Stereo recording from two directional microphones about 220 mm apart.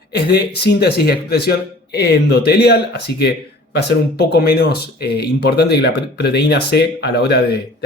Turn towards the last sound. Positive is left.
turn(degrees=50)  # may be behind; listen again after turning